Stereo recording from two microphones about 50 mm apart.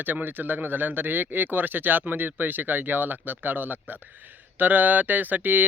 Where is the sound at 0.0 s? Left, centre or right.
Right.